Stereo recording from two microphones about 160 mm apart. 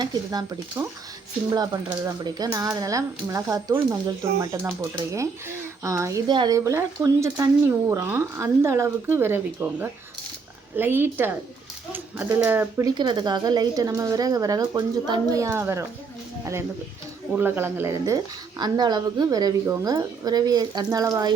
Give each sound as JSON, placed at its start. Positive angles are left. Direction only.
{"t": 0.0, "sound": "speech", "side_deg": -25}
{"t": 12.9, "sound": "speech", "side_deg": -30}
{"t": 17.3, "sound": "speech", "side_deg": -10}